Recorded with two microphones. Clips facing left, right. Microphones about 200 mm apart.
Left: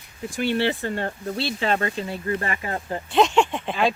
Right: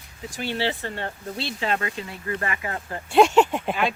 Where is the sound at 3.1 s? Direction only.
10° right (ahead or behind).